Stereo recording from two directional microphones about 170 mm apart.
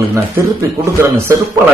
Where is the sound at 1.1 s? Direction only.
15° right (ahead or behind).